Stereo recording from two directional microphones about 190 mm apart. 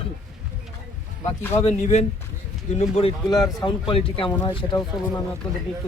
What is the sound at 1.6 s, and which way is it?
Speech, 35° left (ahead or behind).